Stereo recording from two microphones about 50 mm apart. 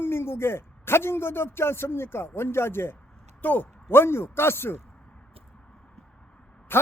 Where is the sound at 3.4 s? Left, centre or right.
Left.